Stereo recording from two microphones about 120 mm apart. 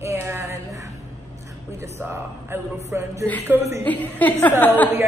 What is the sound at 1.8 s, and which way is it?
Speech, 20° right (ahead or behind).